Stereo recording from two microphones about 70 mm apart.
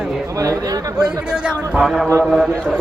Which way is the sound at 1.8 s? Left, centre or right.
Centre.